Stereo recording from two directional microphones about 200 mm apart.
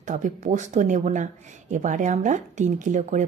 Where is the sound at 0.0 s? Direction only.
35° right (ahead or behind).